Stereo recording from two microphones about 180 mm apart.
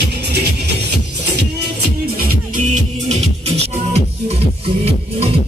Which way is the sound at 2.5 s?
40° right (ahead or behind).